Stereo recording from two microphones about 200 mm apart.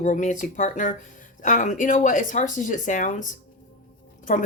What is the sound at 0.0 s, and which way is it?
Speech, 40° left (ahead or behind).